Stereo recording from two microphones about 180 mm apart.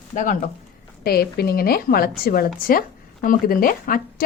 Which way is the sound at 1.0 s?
60° left (ahead or behind).